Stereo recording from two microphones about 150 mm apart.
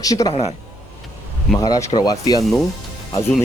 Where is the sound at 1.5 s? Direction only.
25° left (ahead or behind).